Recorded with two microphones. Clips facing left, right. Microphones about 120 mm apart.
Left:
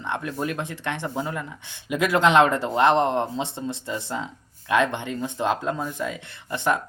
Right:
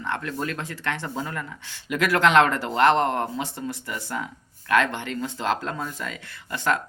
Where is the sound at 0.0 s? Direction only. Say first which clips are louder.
Left 1 dB; 20° left (ahead or behind).